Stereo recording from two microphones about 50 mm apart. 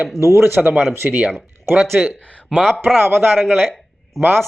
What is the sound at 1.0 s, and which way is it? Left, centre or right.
Speech, right.